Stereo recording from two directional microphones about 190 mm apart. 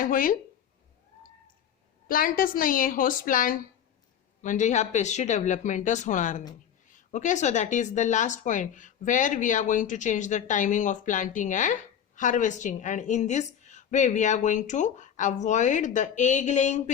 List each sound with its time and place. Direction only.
0.0 s a woman's voice: 45° left (ahead or behind)
2.0 s a woman's voice: 50° left (ahead or behind)